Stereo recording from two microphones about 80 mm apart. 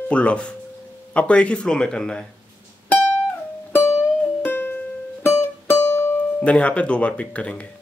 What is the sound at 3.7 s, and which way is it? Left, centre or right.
Music, left.